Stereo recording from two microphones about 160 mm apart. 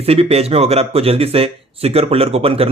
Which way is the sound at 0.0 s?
40° right (ahead or behind).